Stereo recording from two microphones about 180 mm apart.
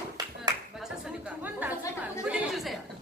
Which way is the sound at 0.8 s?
5° right (ahead or behind).